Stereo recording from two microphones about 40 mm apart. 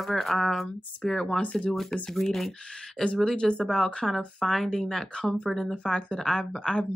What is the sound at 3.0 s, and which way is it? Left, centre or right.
Speech, centre.